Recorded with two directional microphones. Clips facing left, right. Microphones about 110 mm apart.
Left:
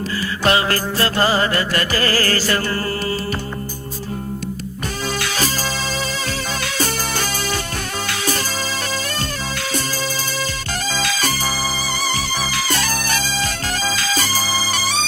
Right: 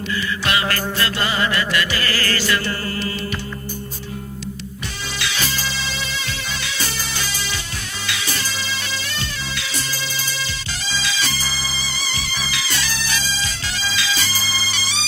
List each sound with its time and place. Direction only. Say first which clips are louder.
0.4 s music: left 6 dB; 35° left (ahead or behind)
5.2 s music: left 3 dB; 45° left (ahead or behind)
10.8 s music: left 3 dB; 50° left (ahead or behind)